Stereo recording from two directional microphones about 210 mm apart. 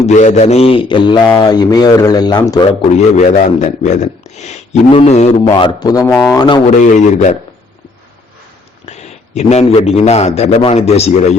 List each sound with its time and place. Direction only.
0.0 s a man's voice: 35° left (ahead or behind); by 2.6 s 20° left (ahead or behind)
2.9 s a man's voice: 35° left (ahead or behind)
5.5 s a man's voice: 20° left (ahead or behind)
6.7 s a man's voice: 35° left (ahead or behind)
8.9 s a man's voice: 30° left (ahead or behind)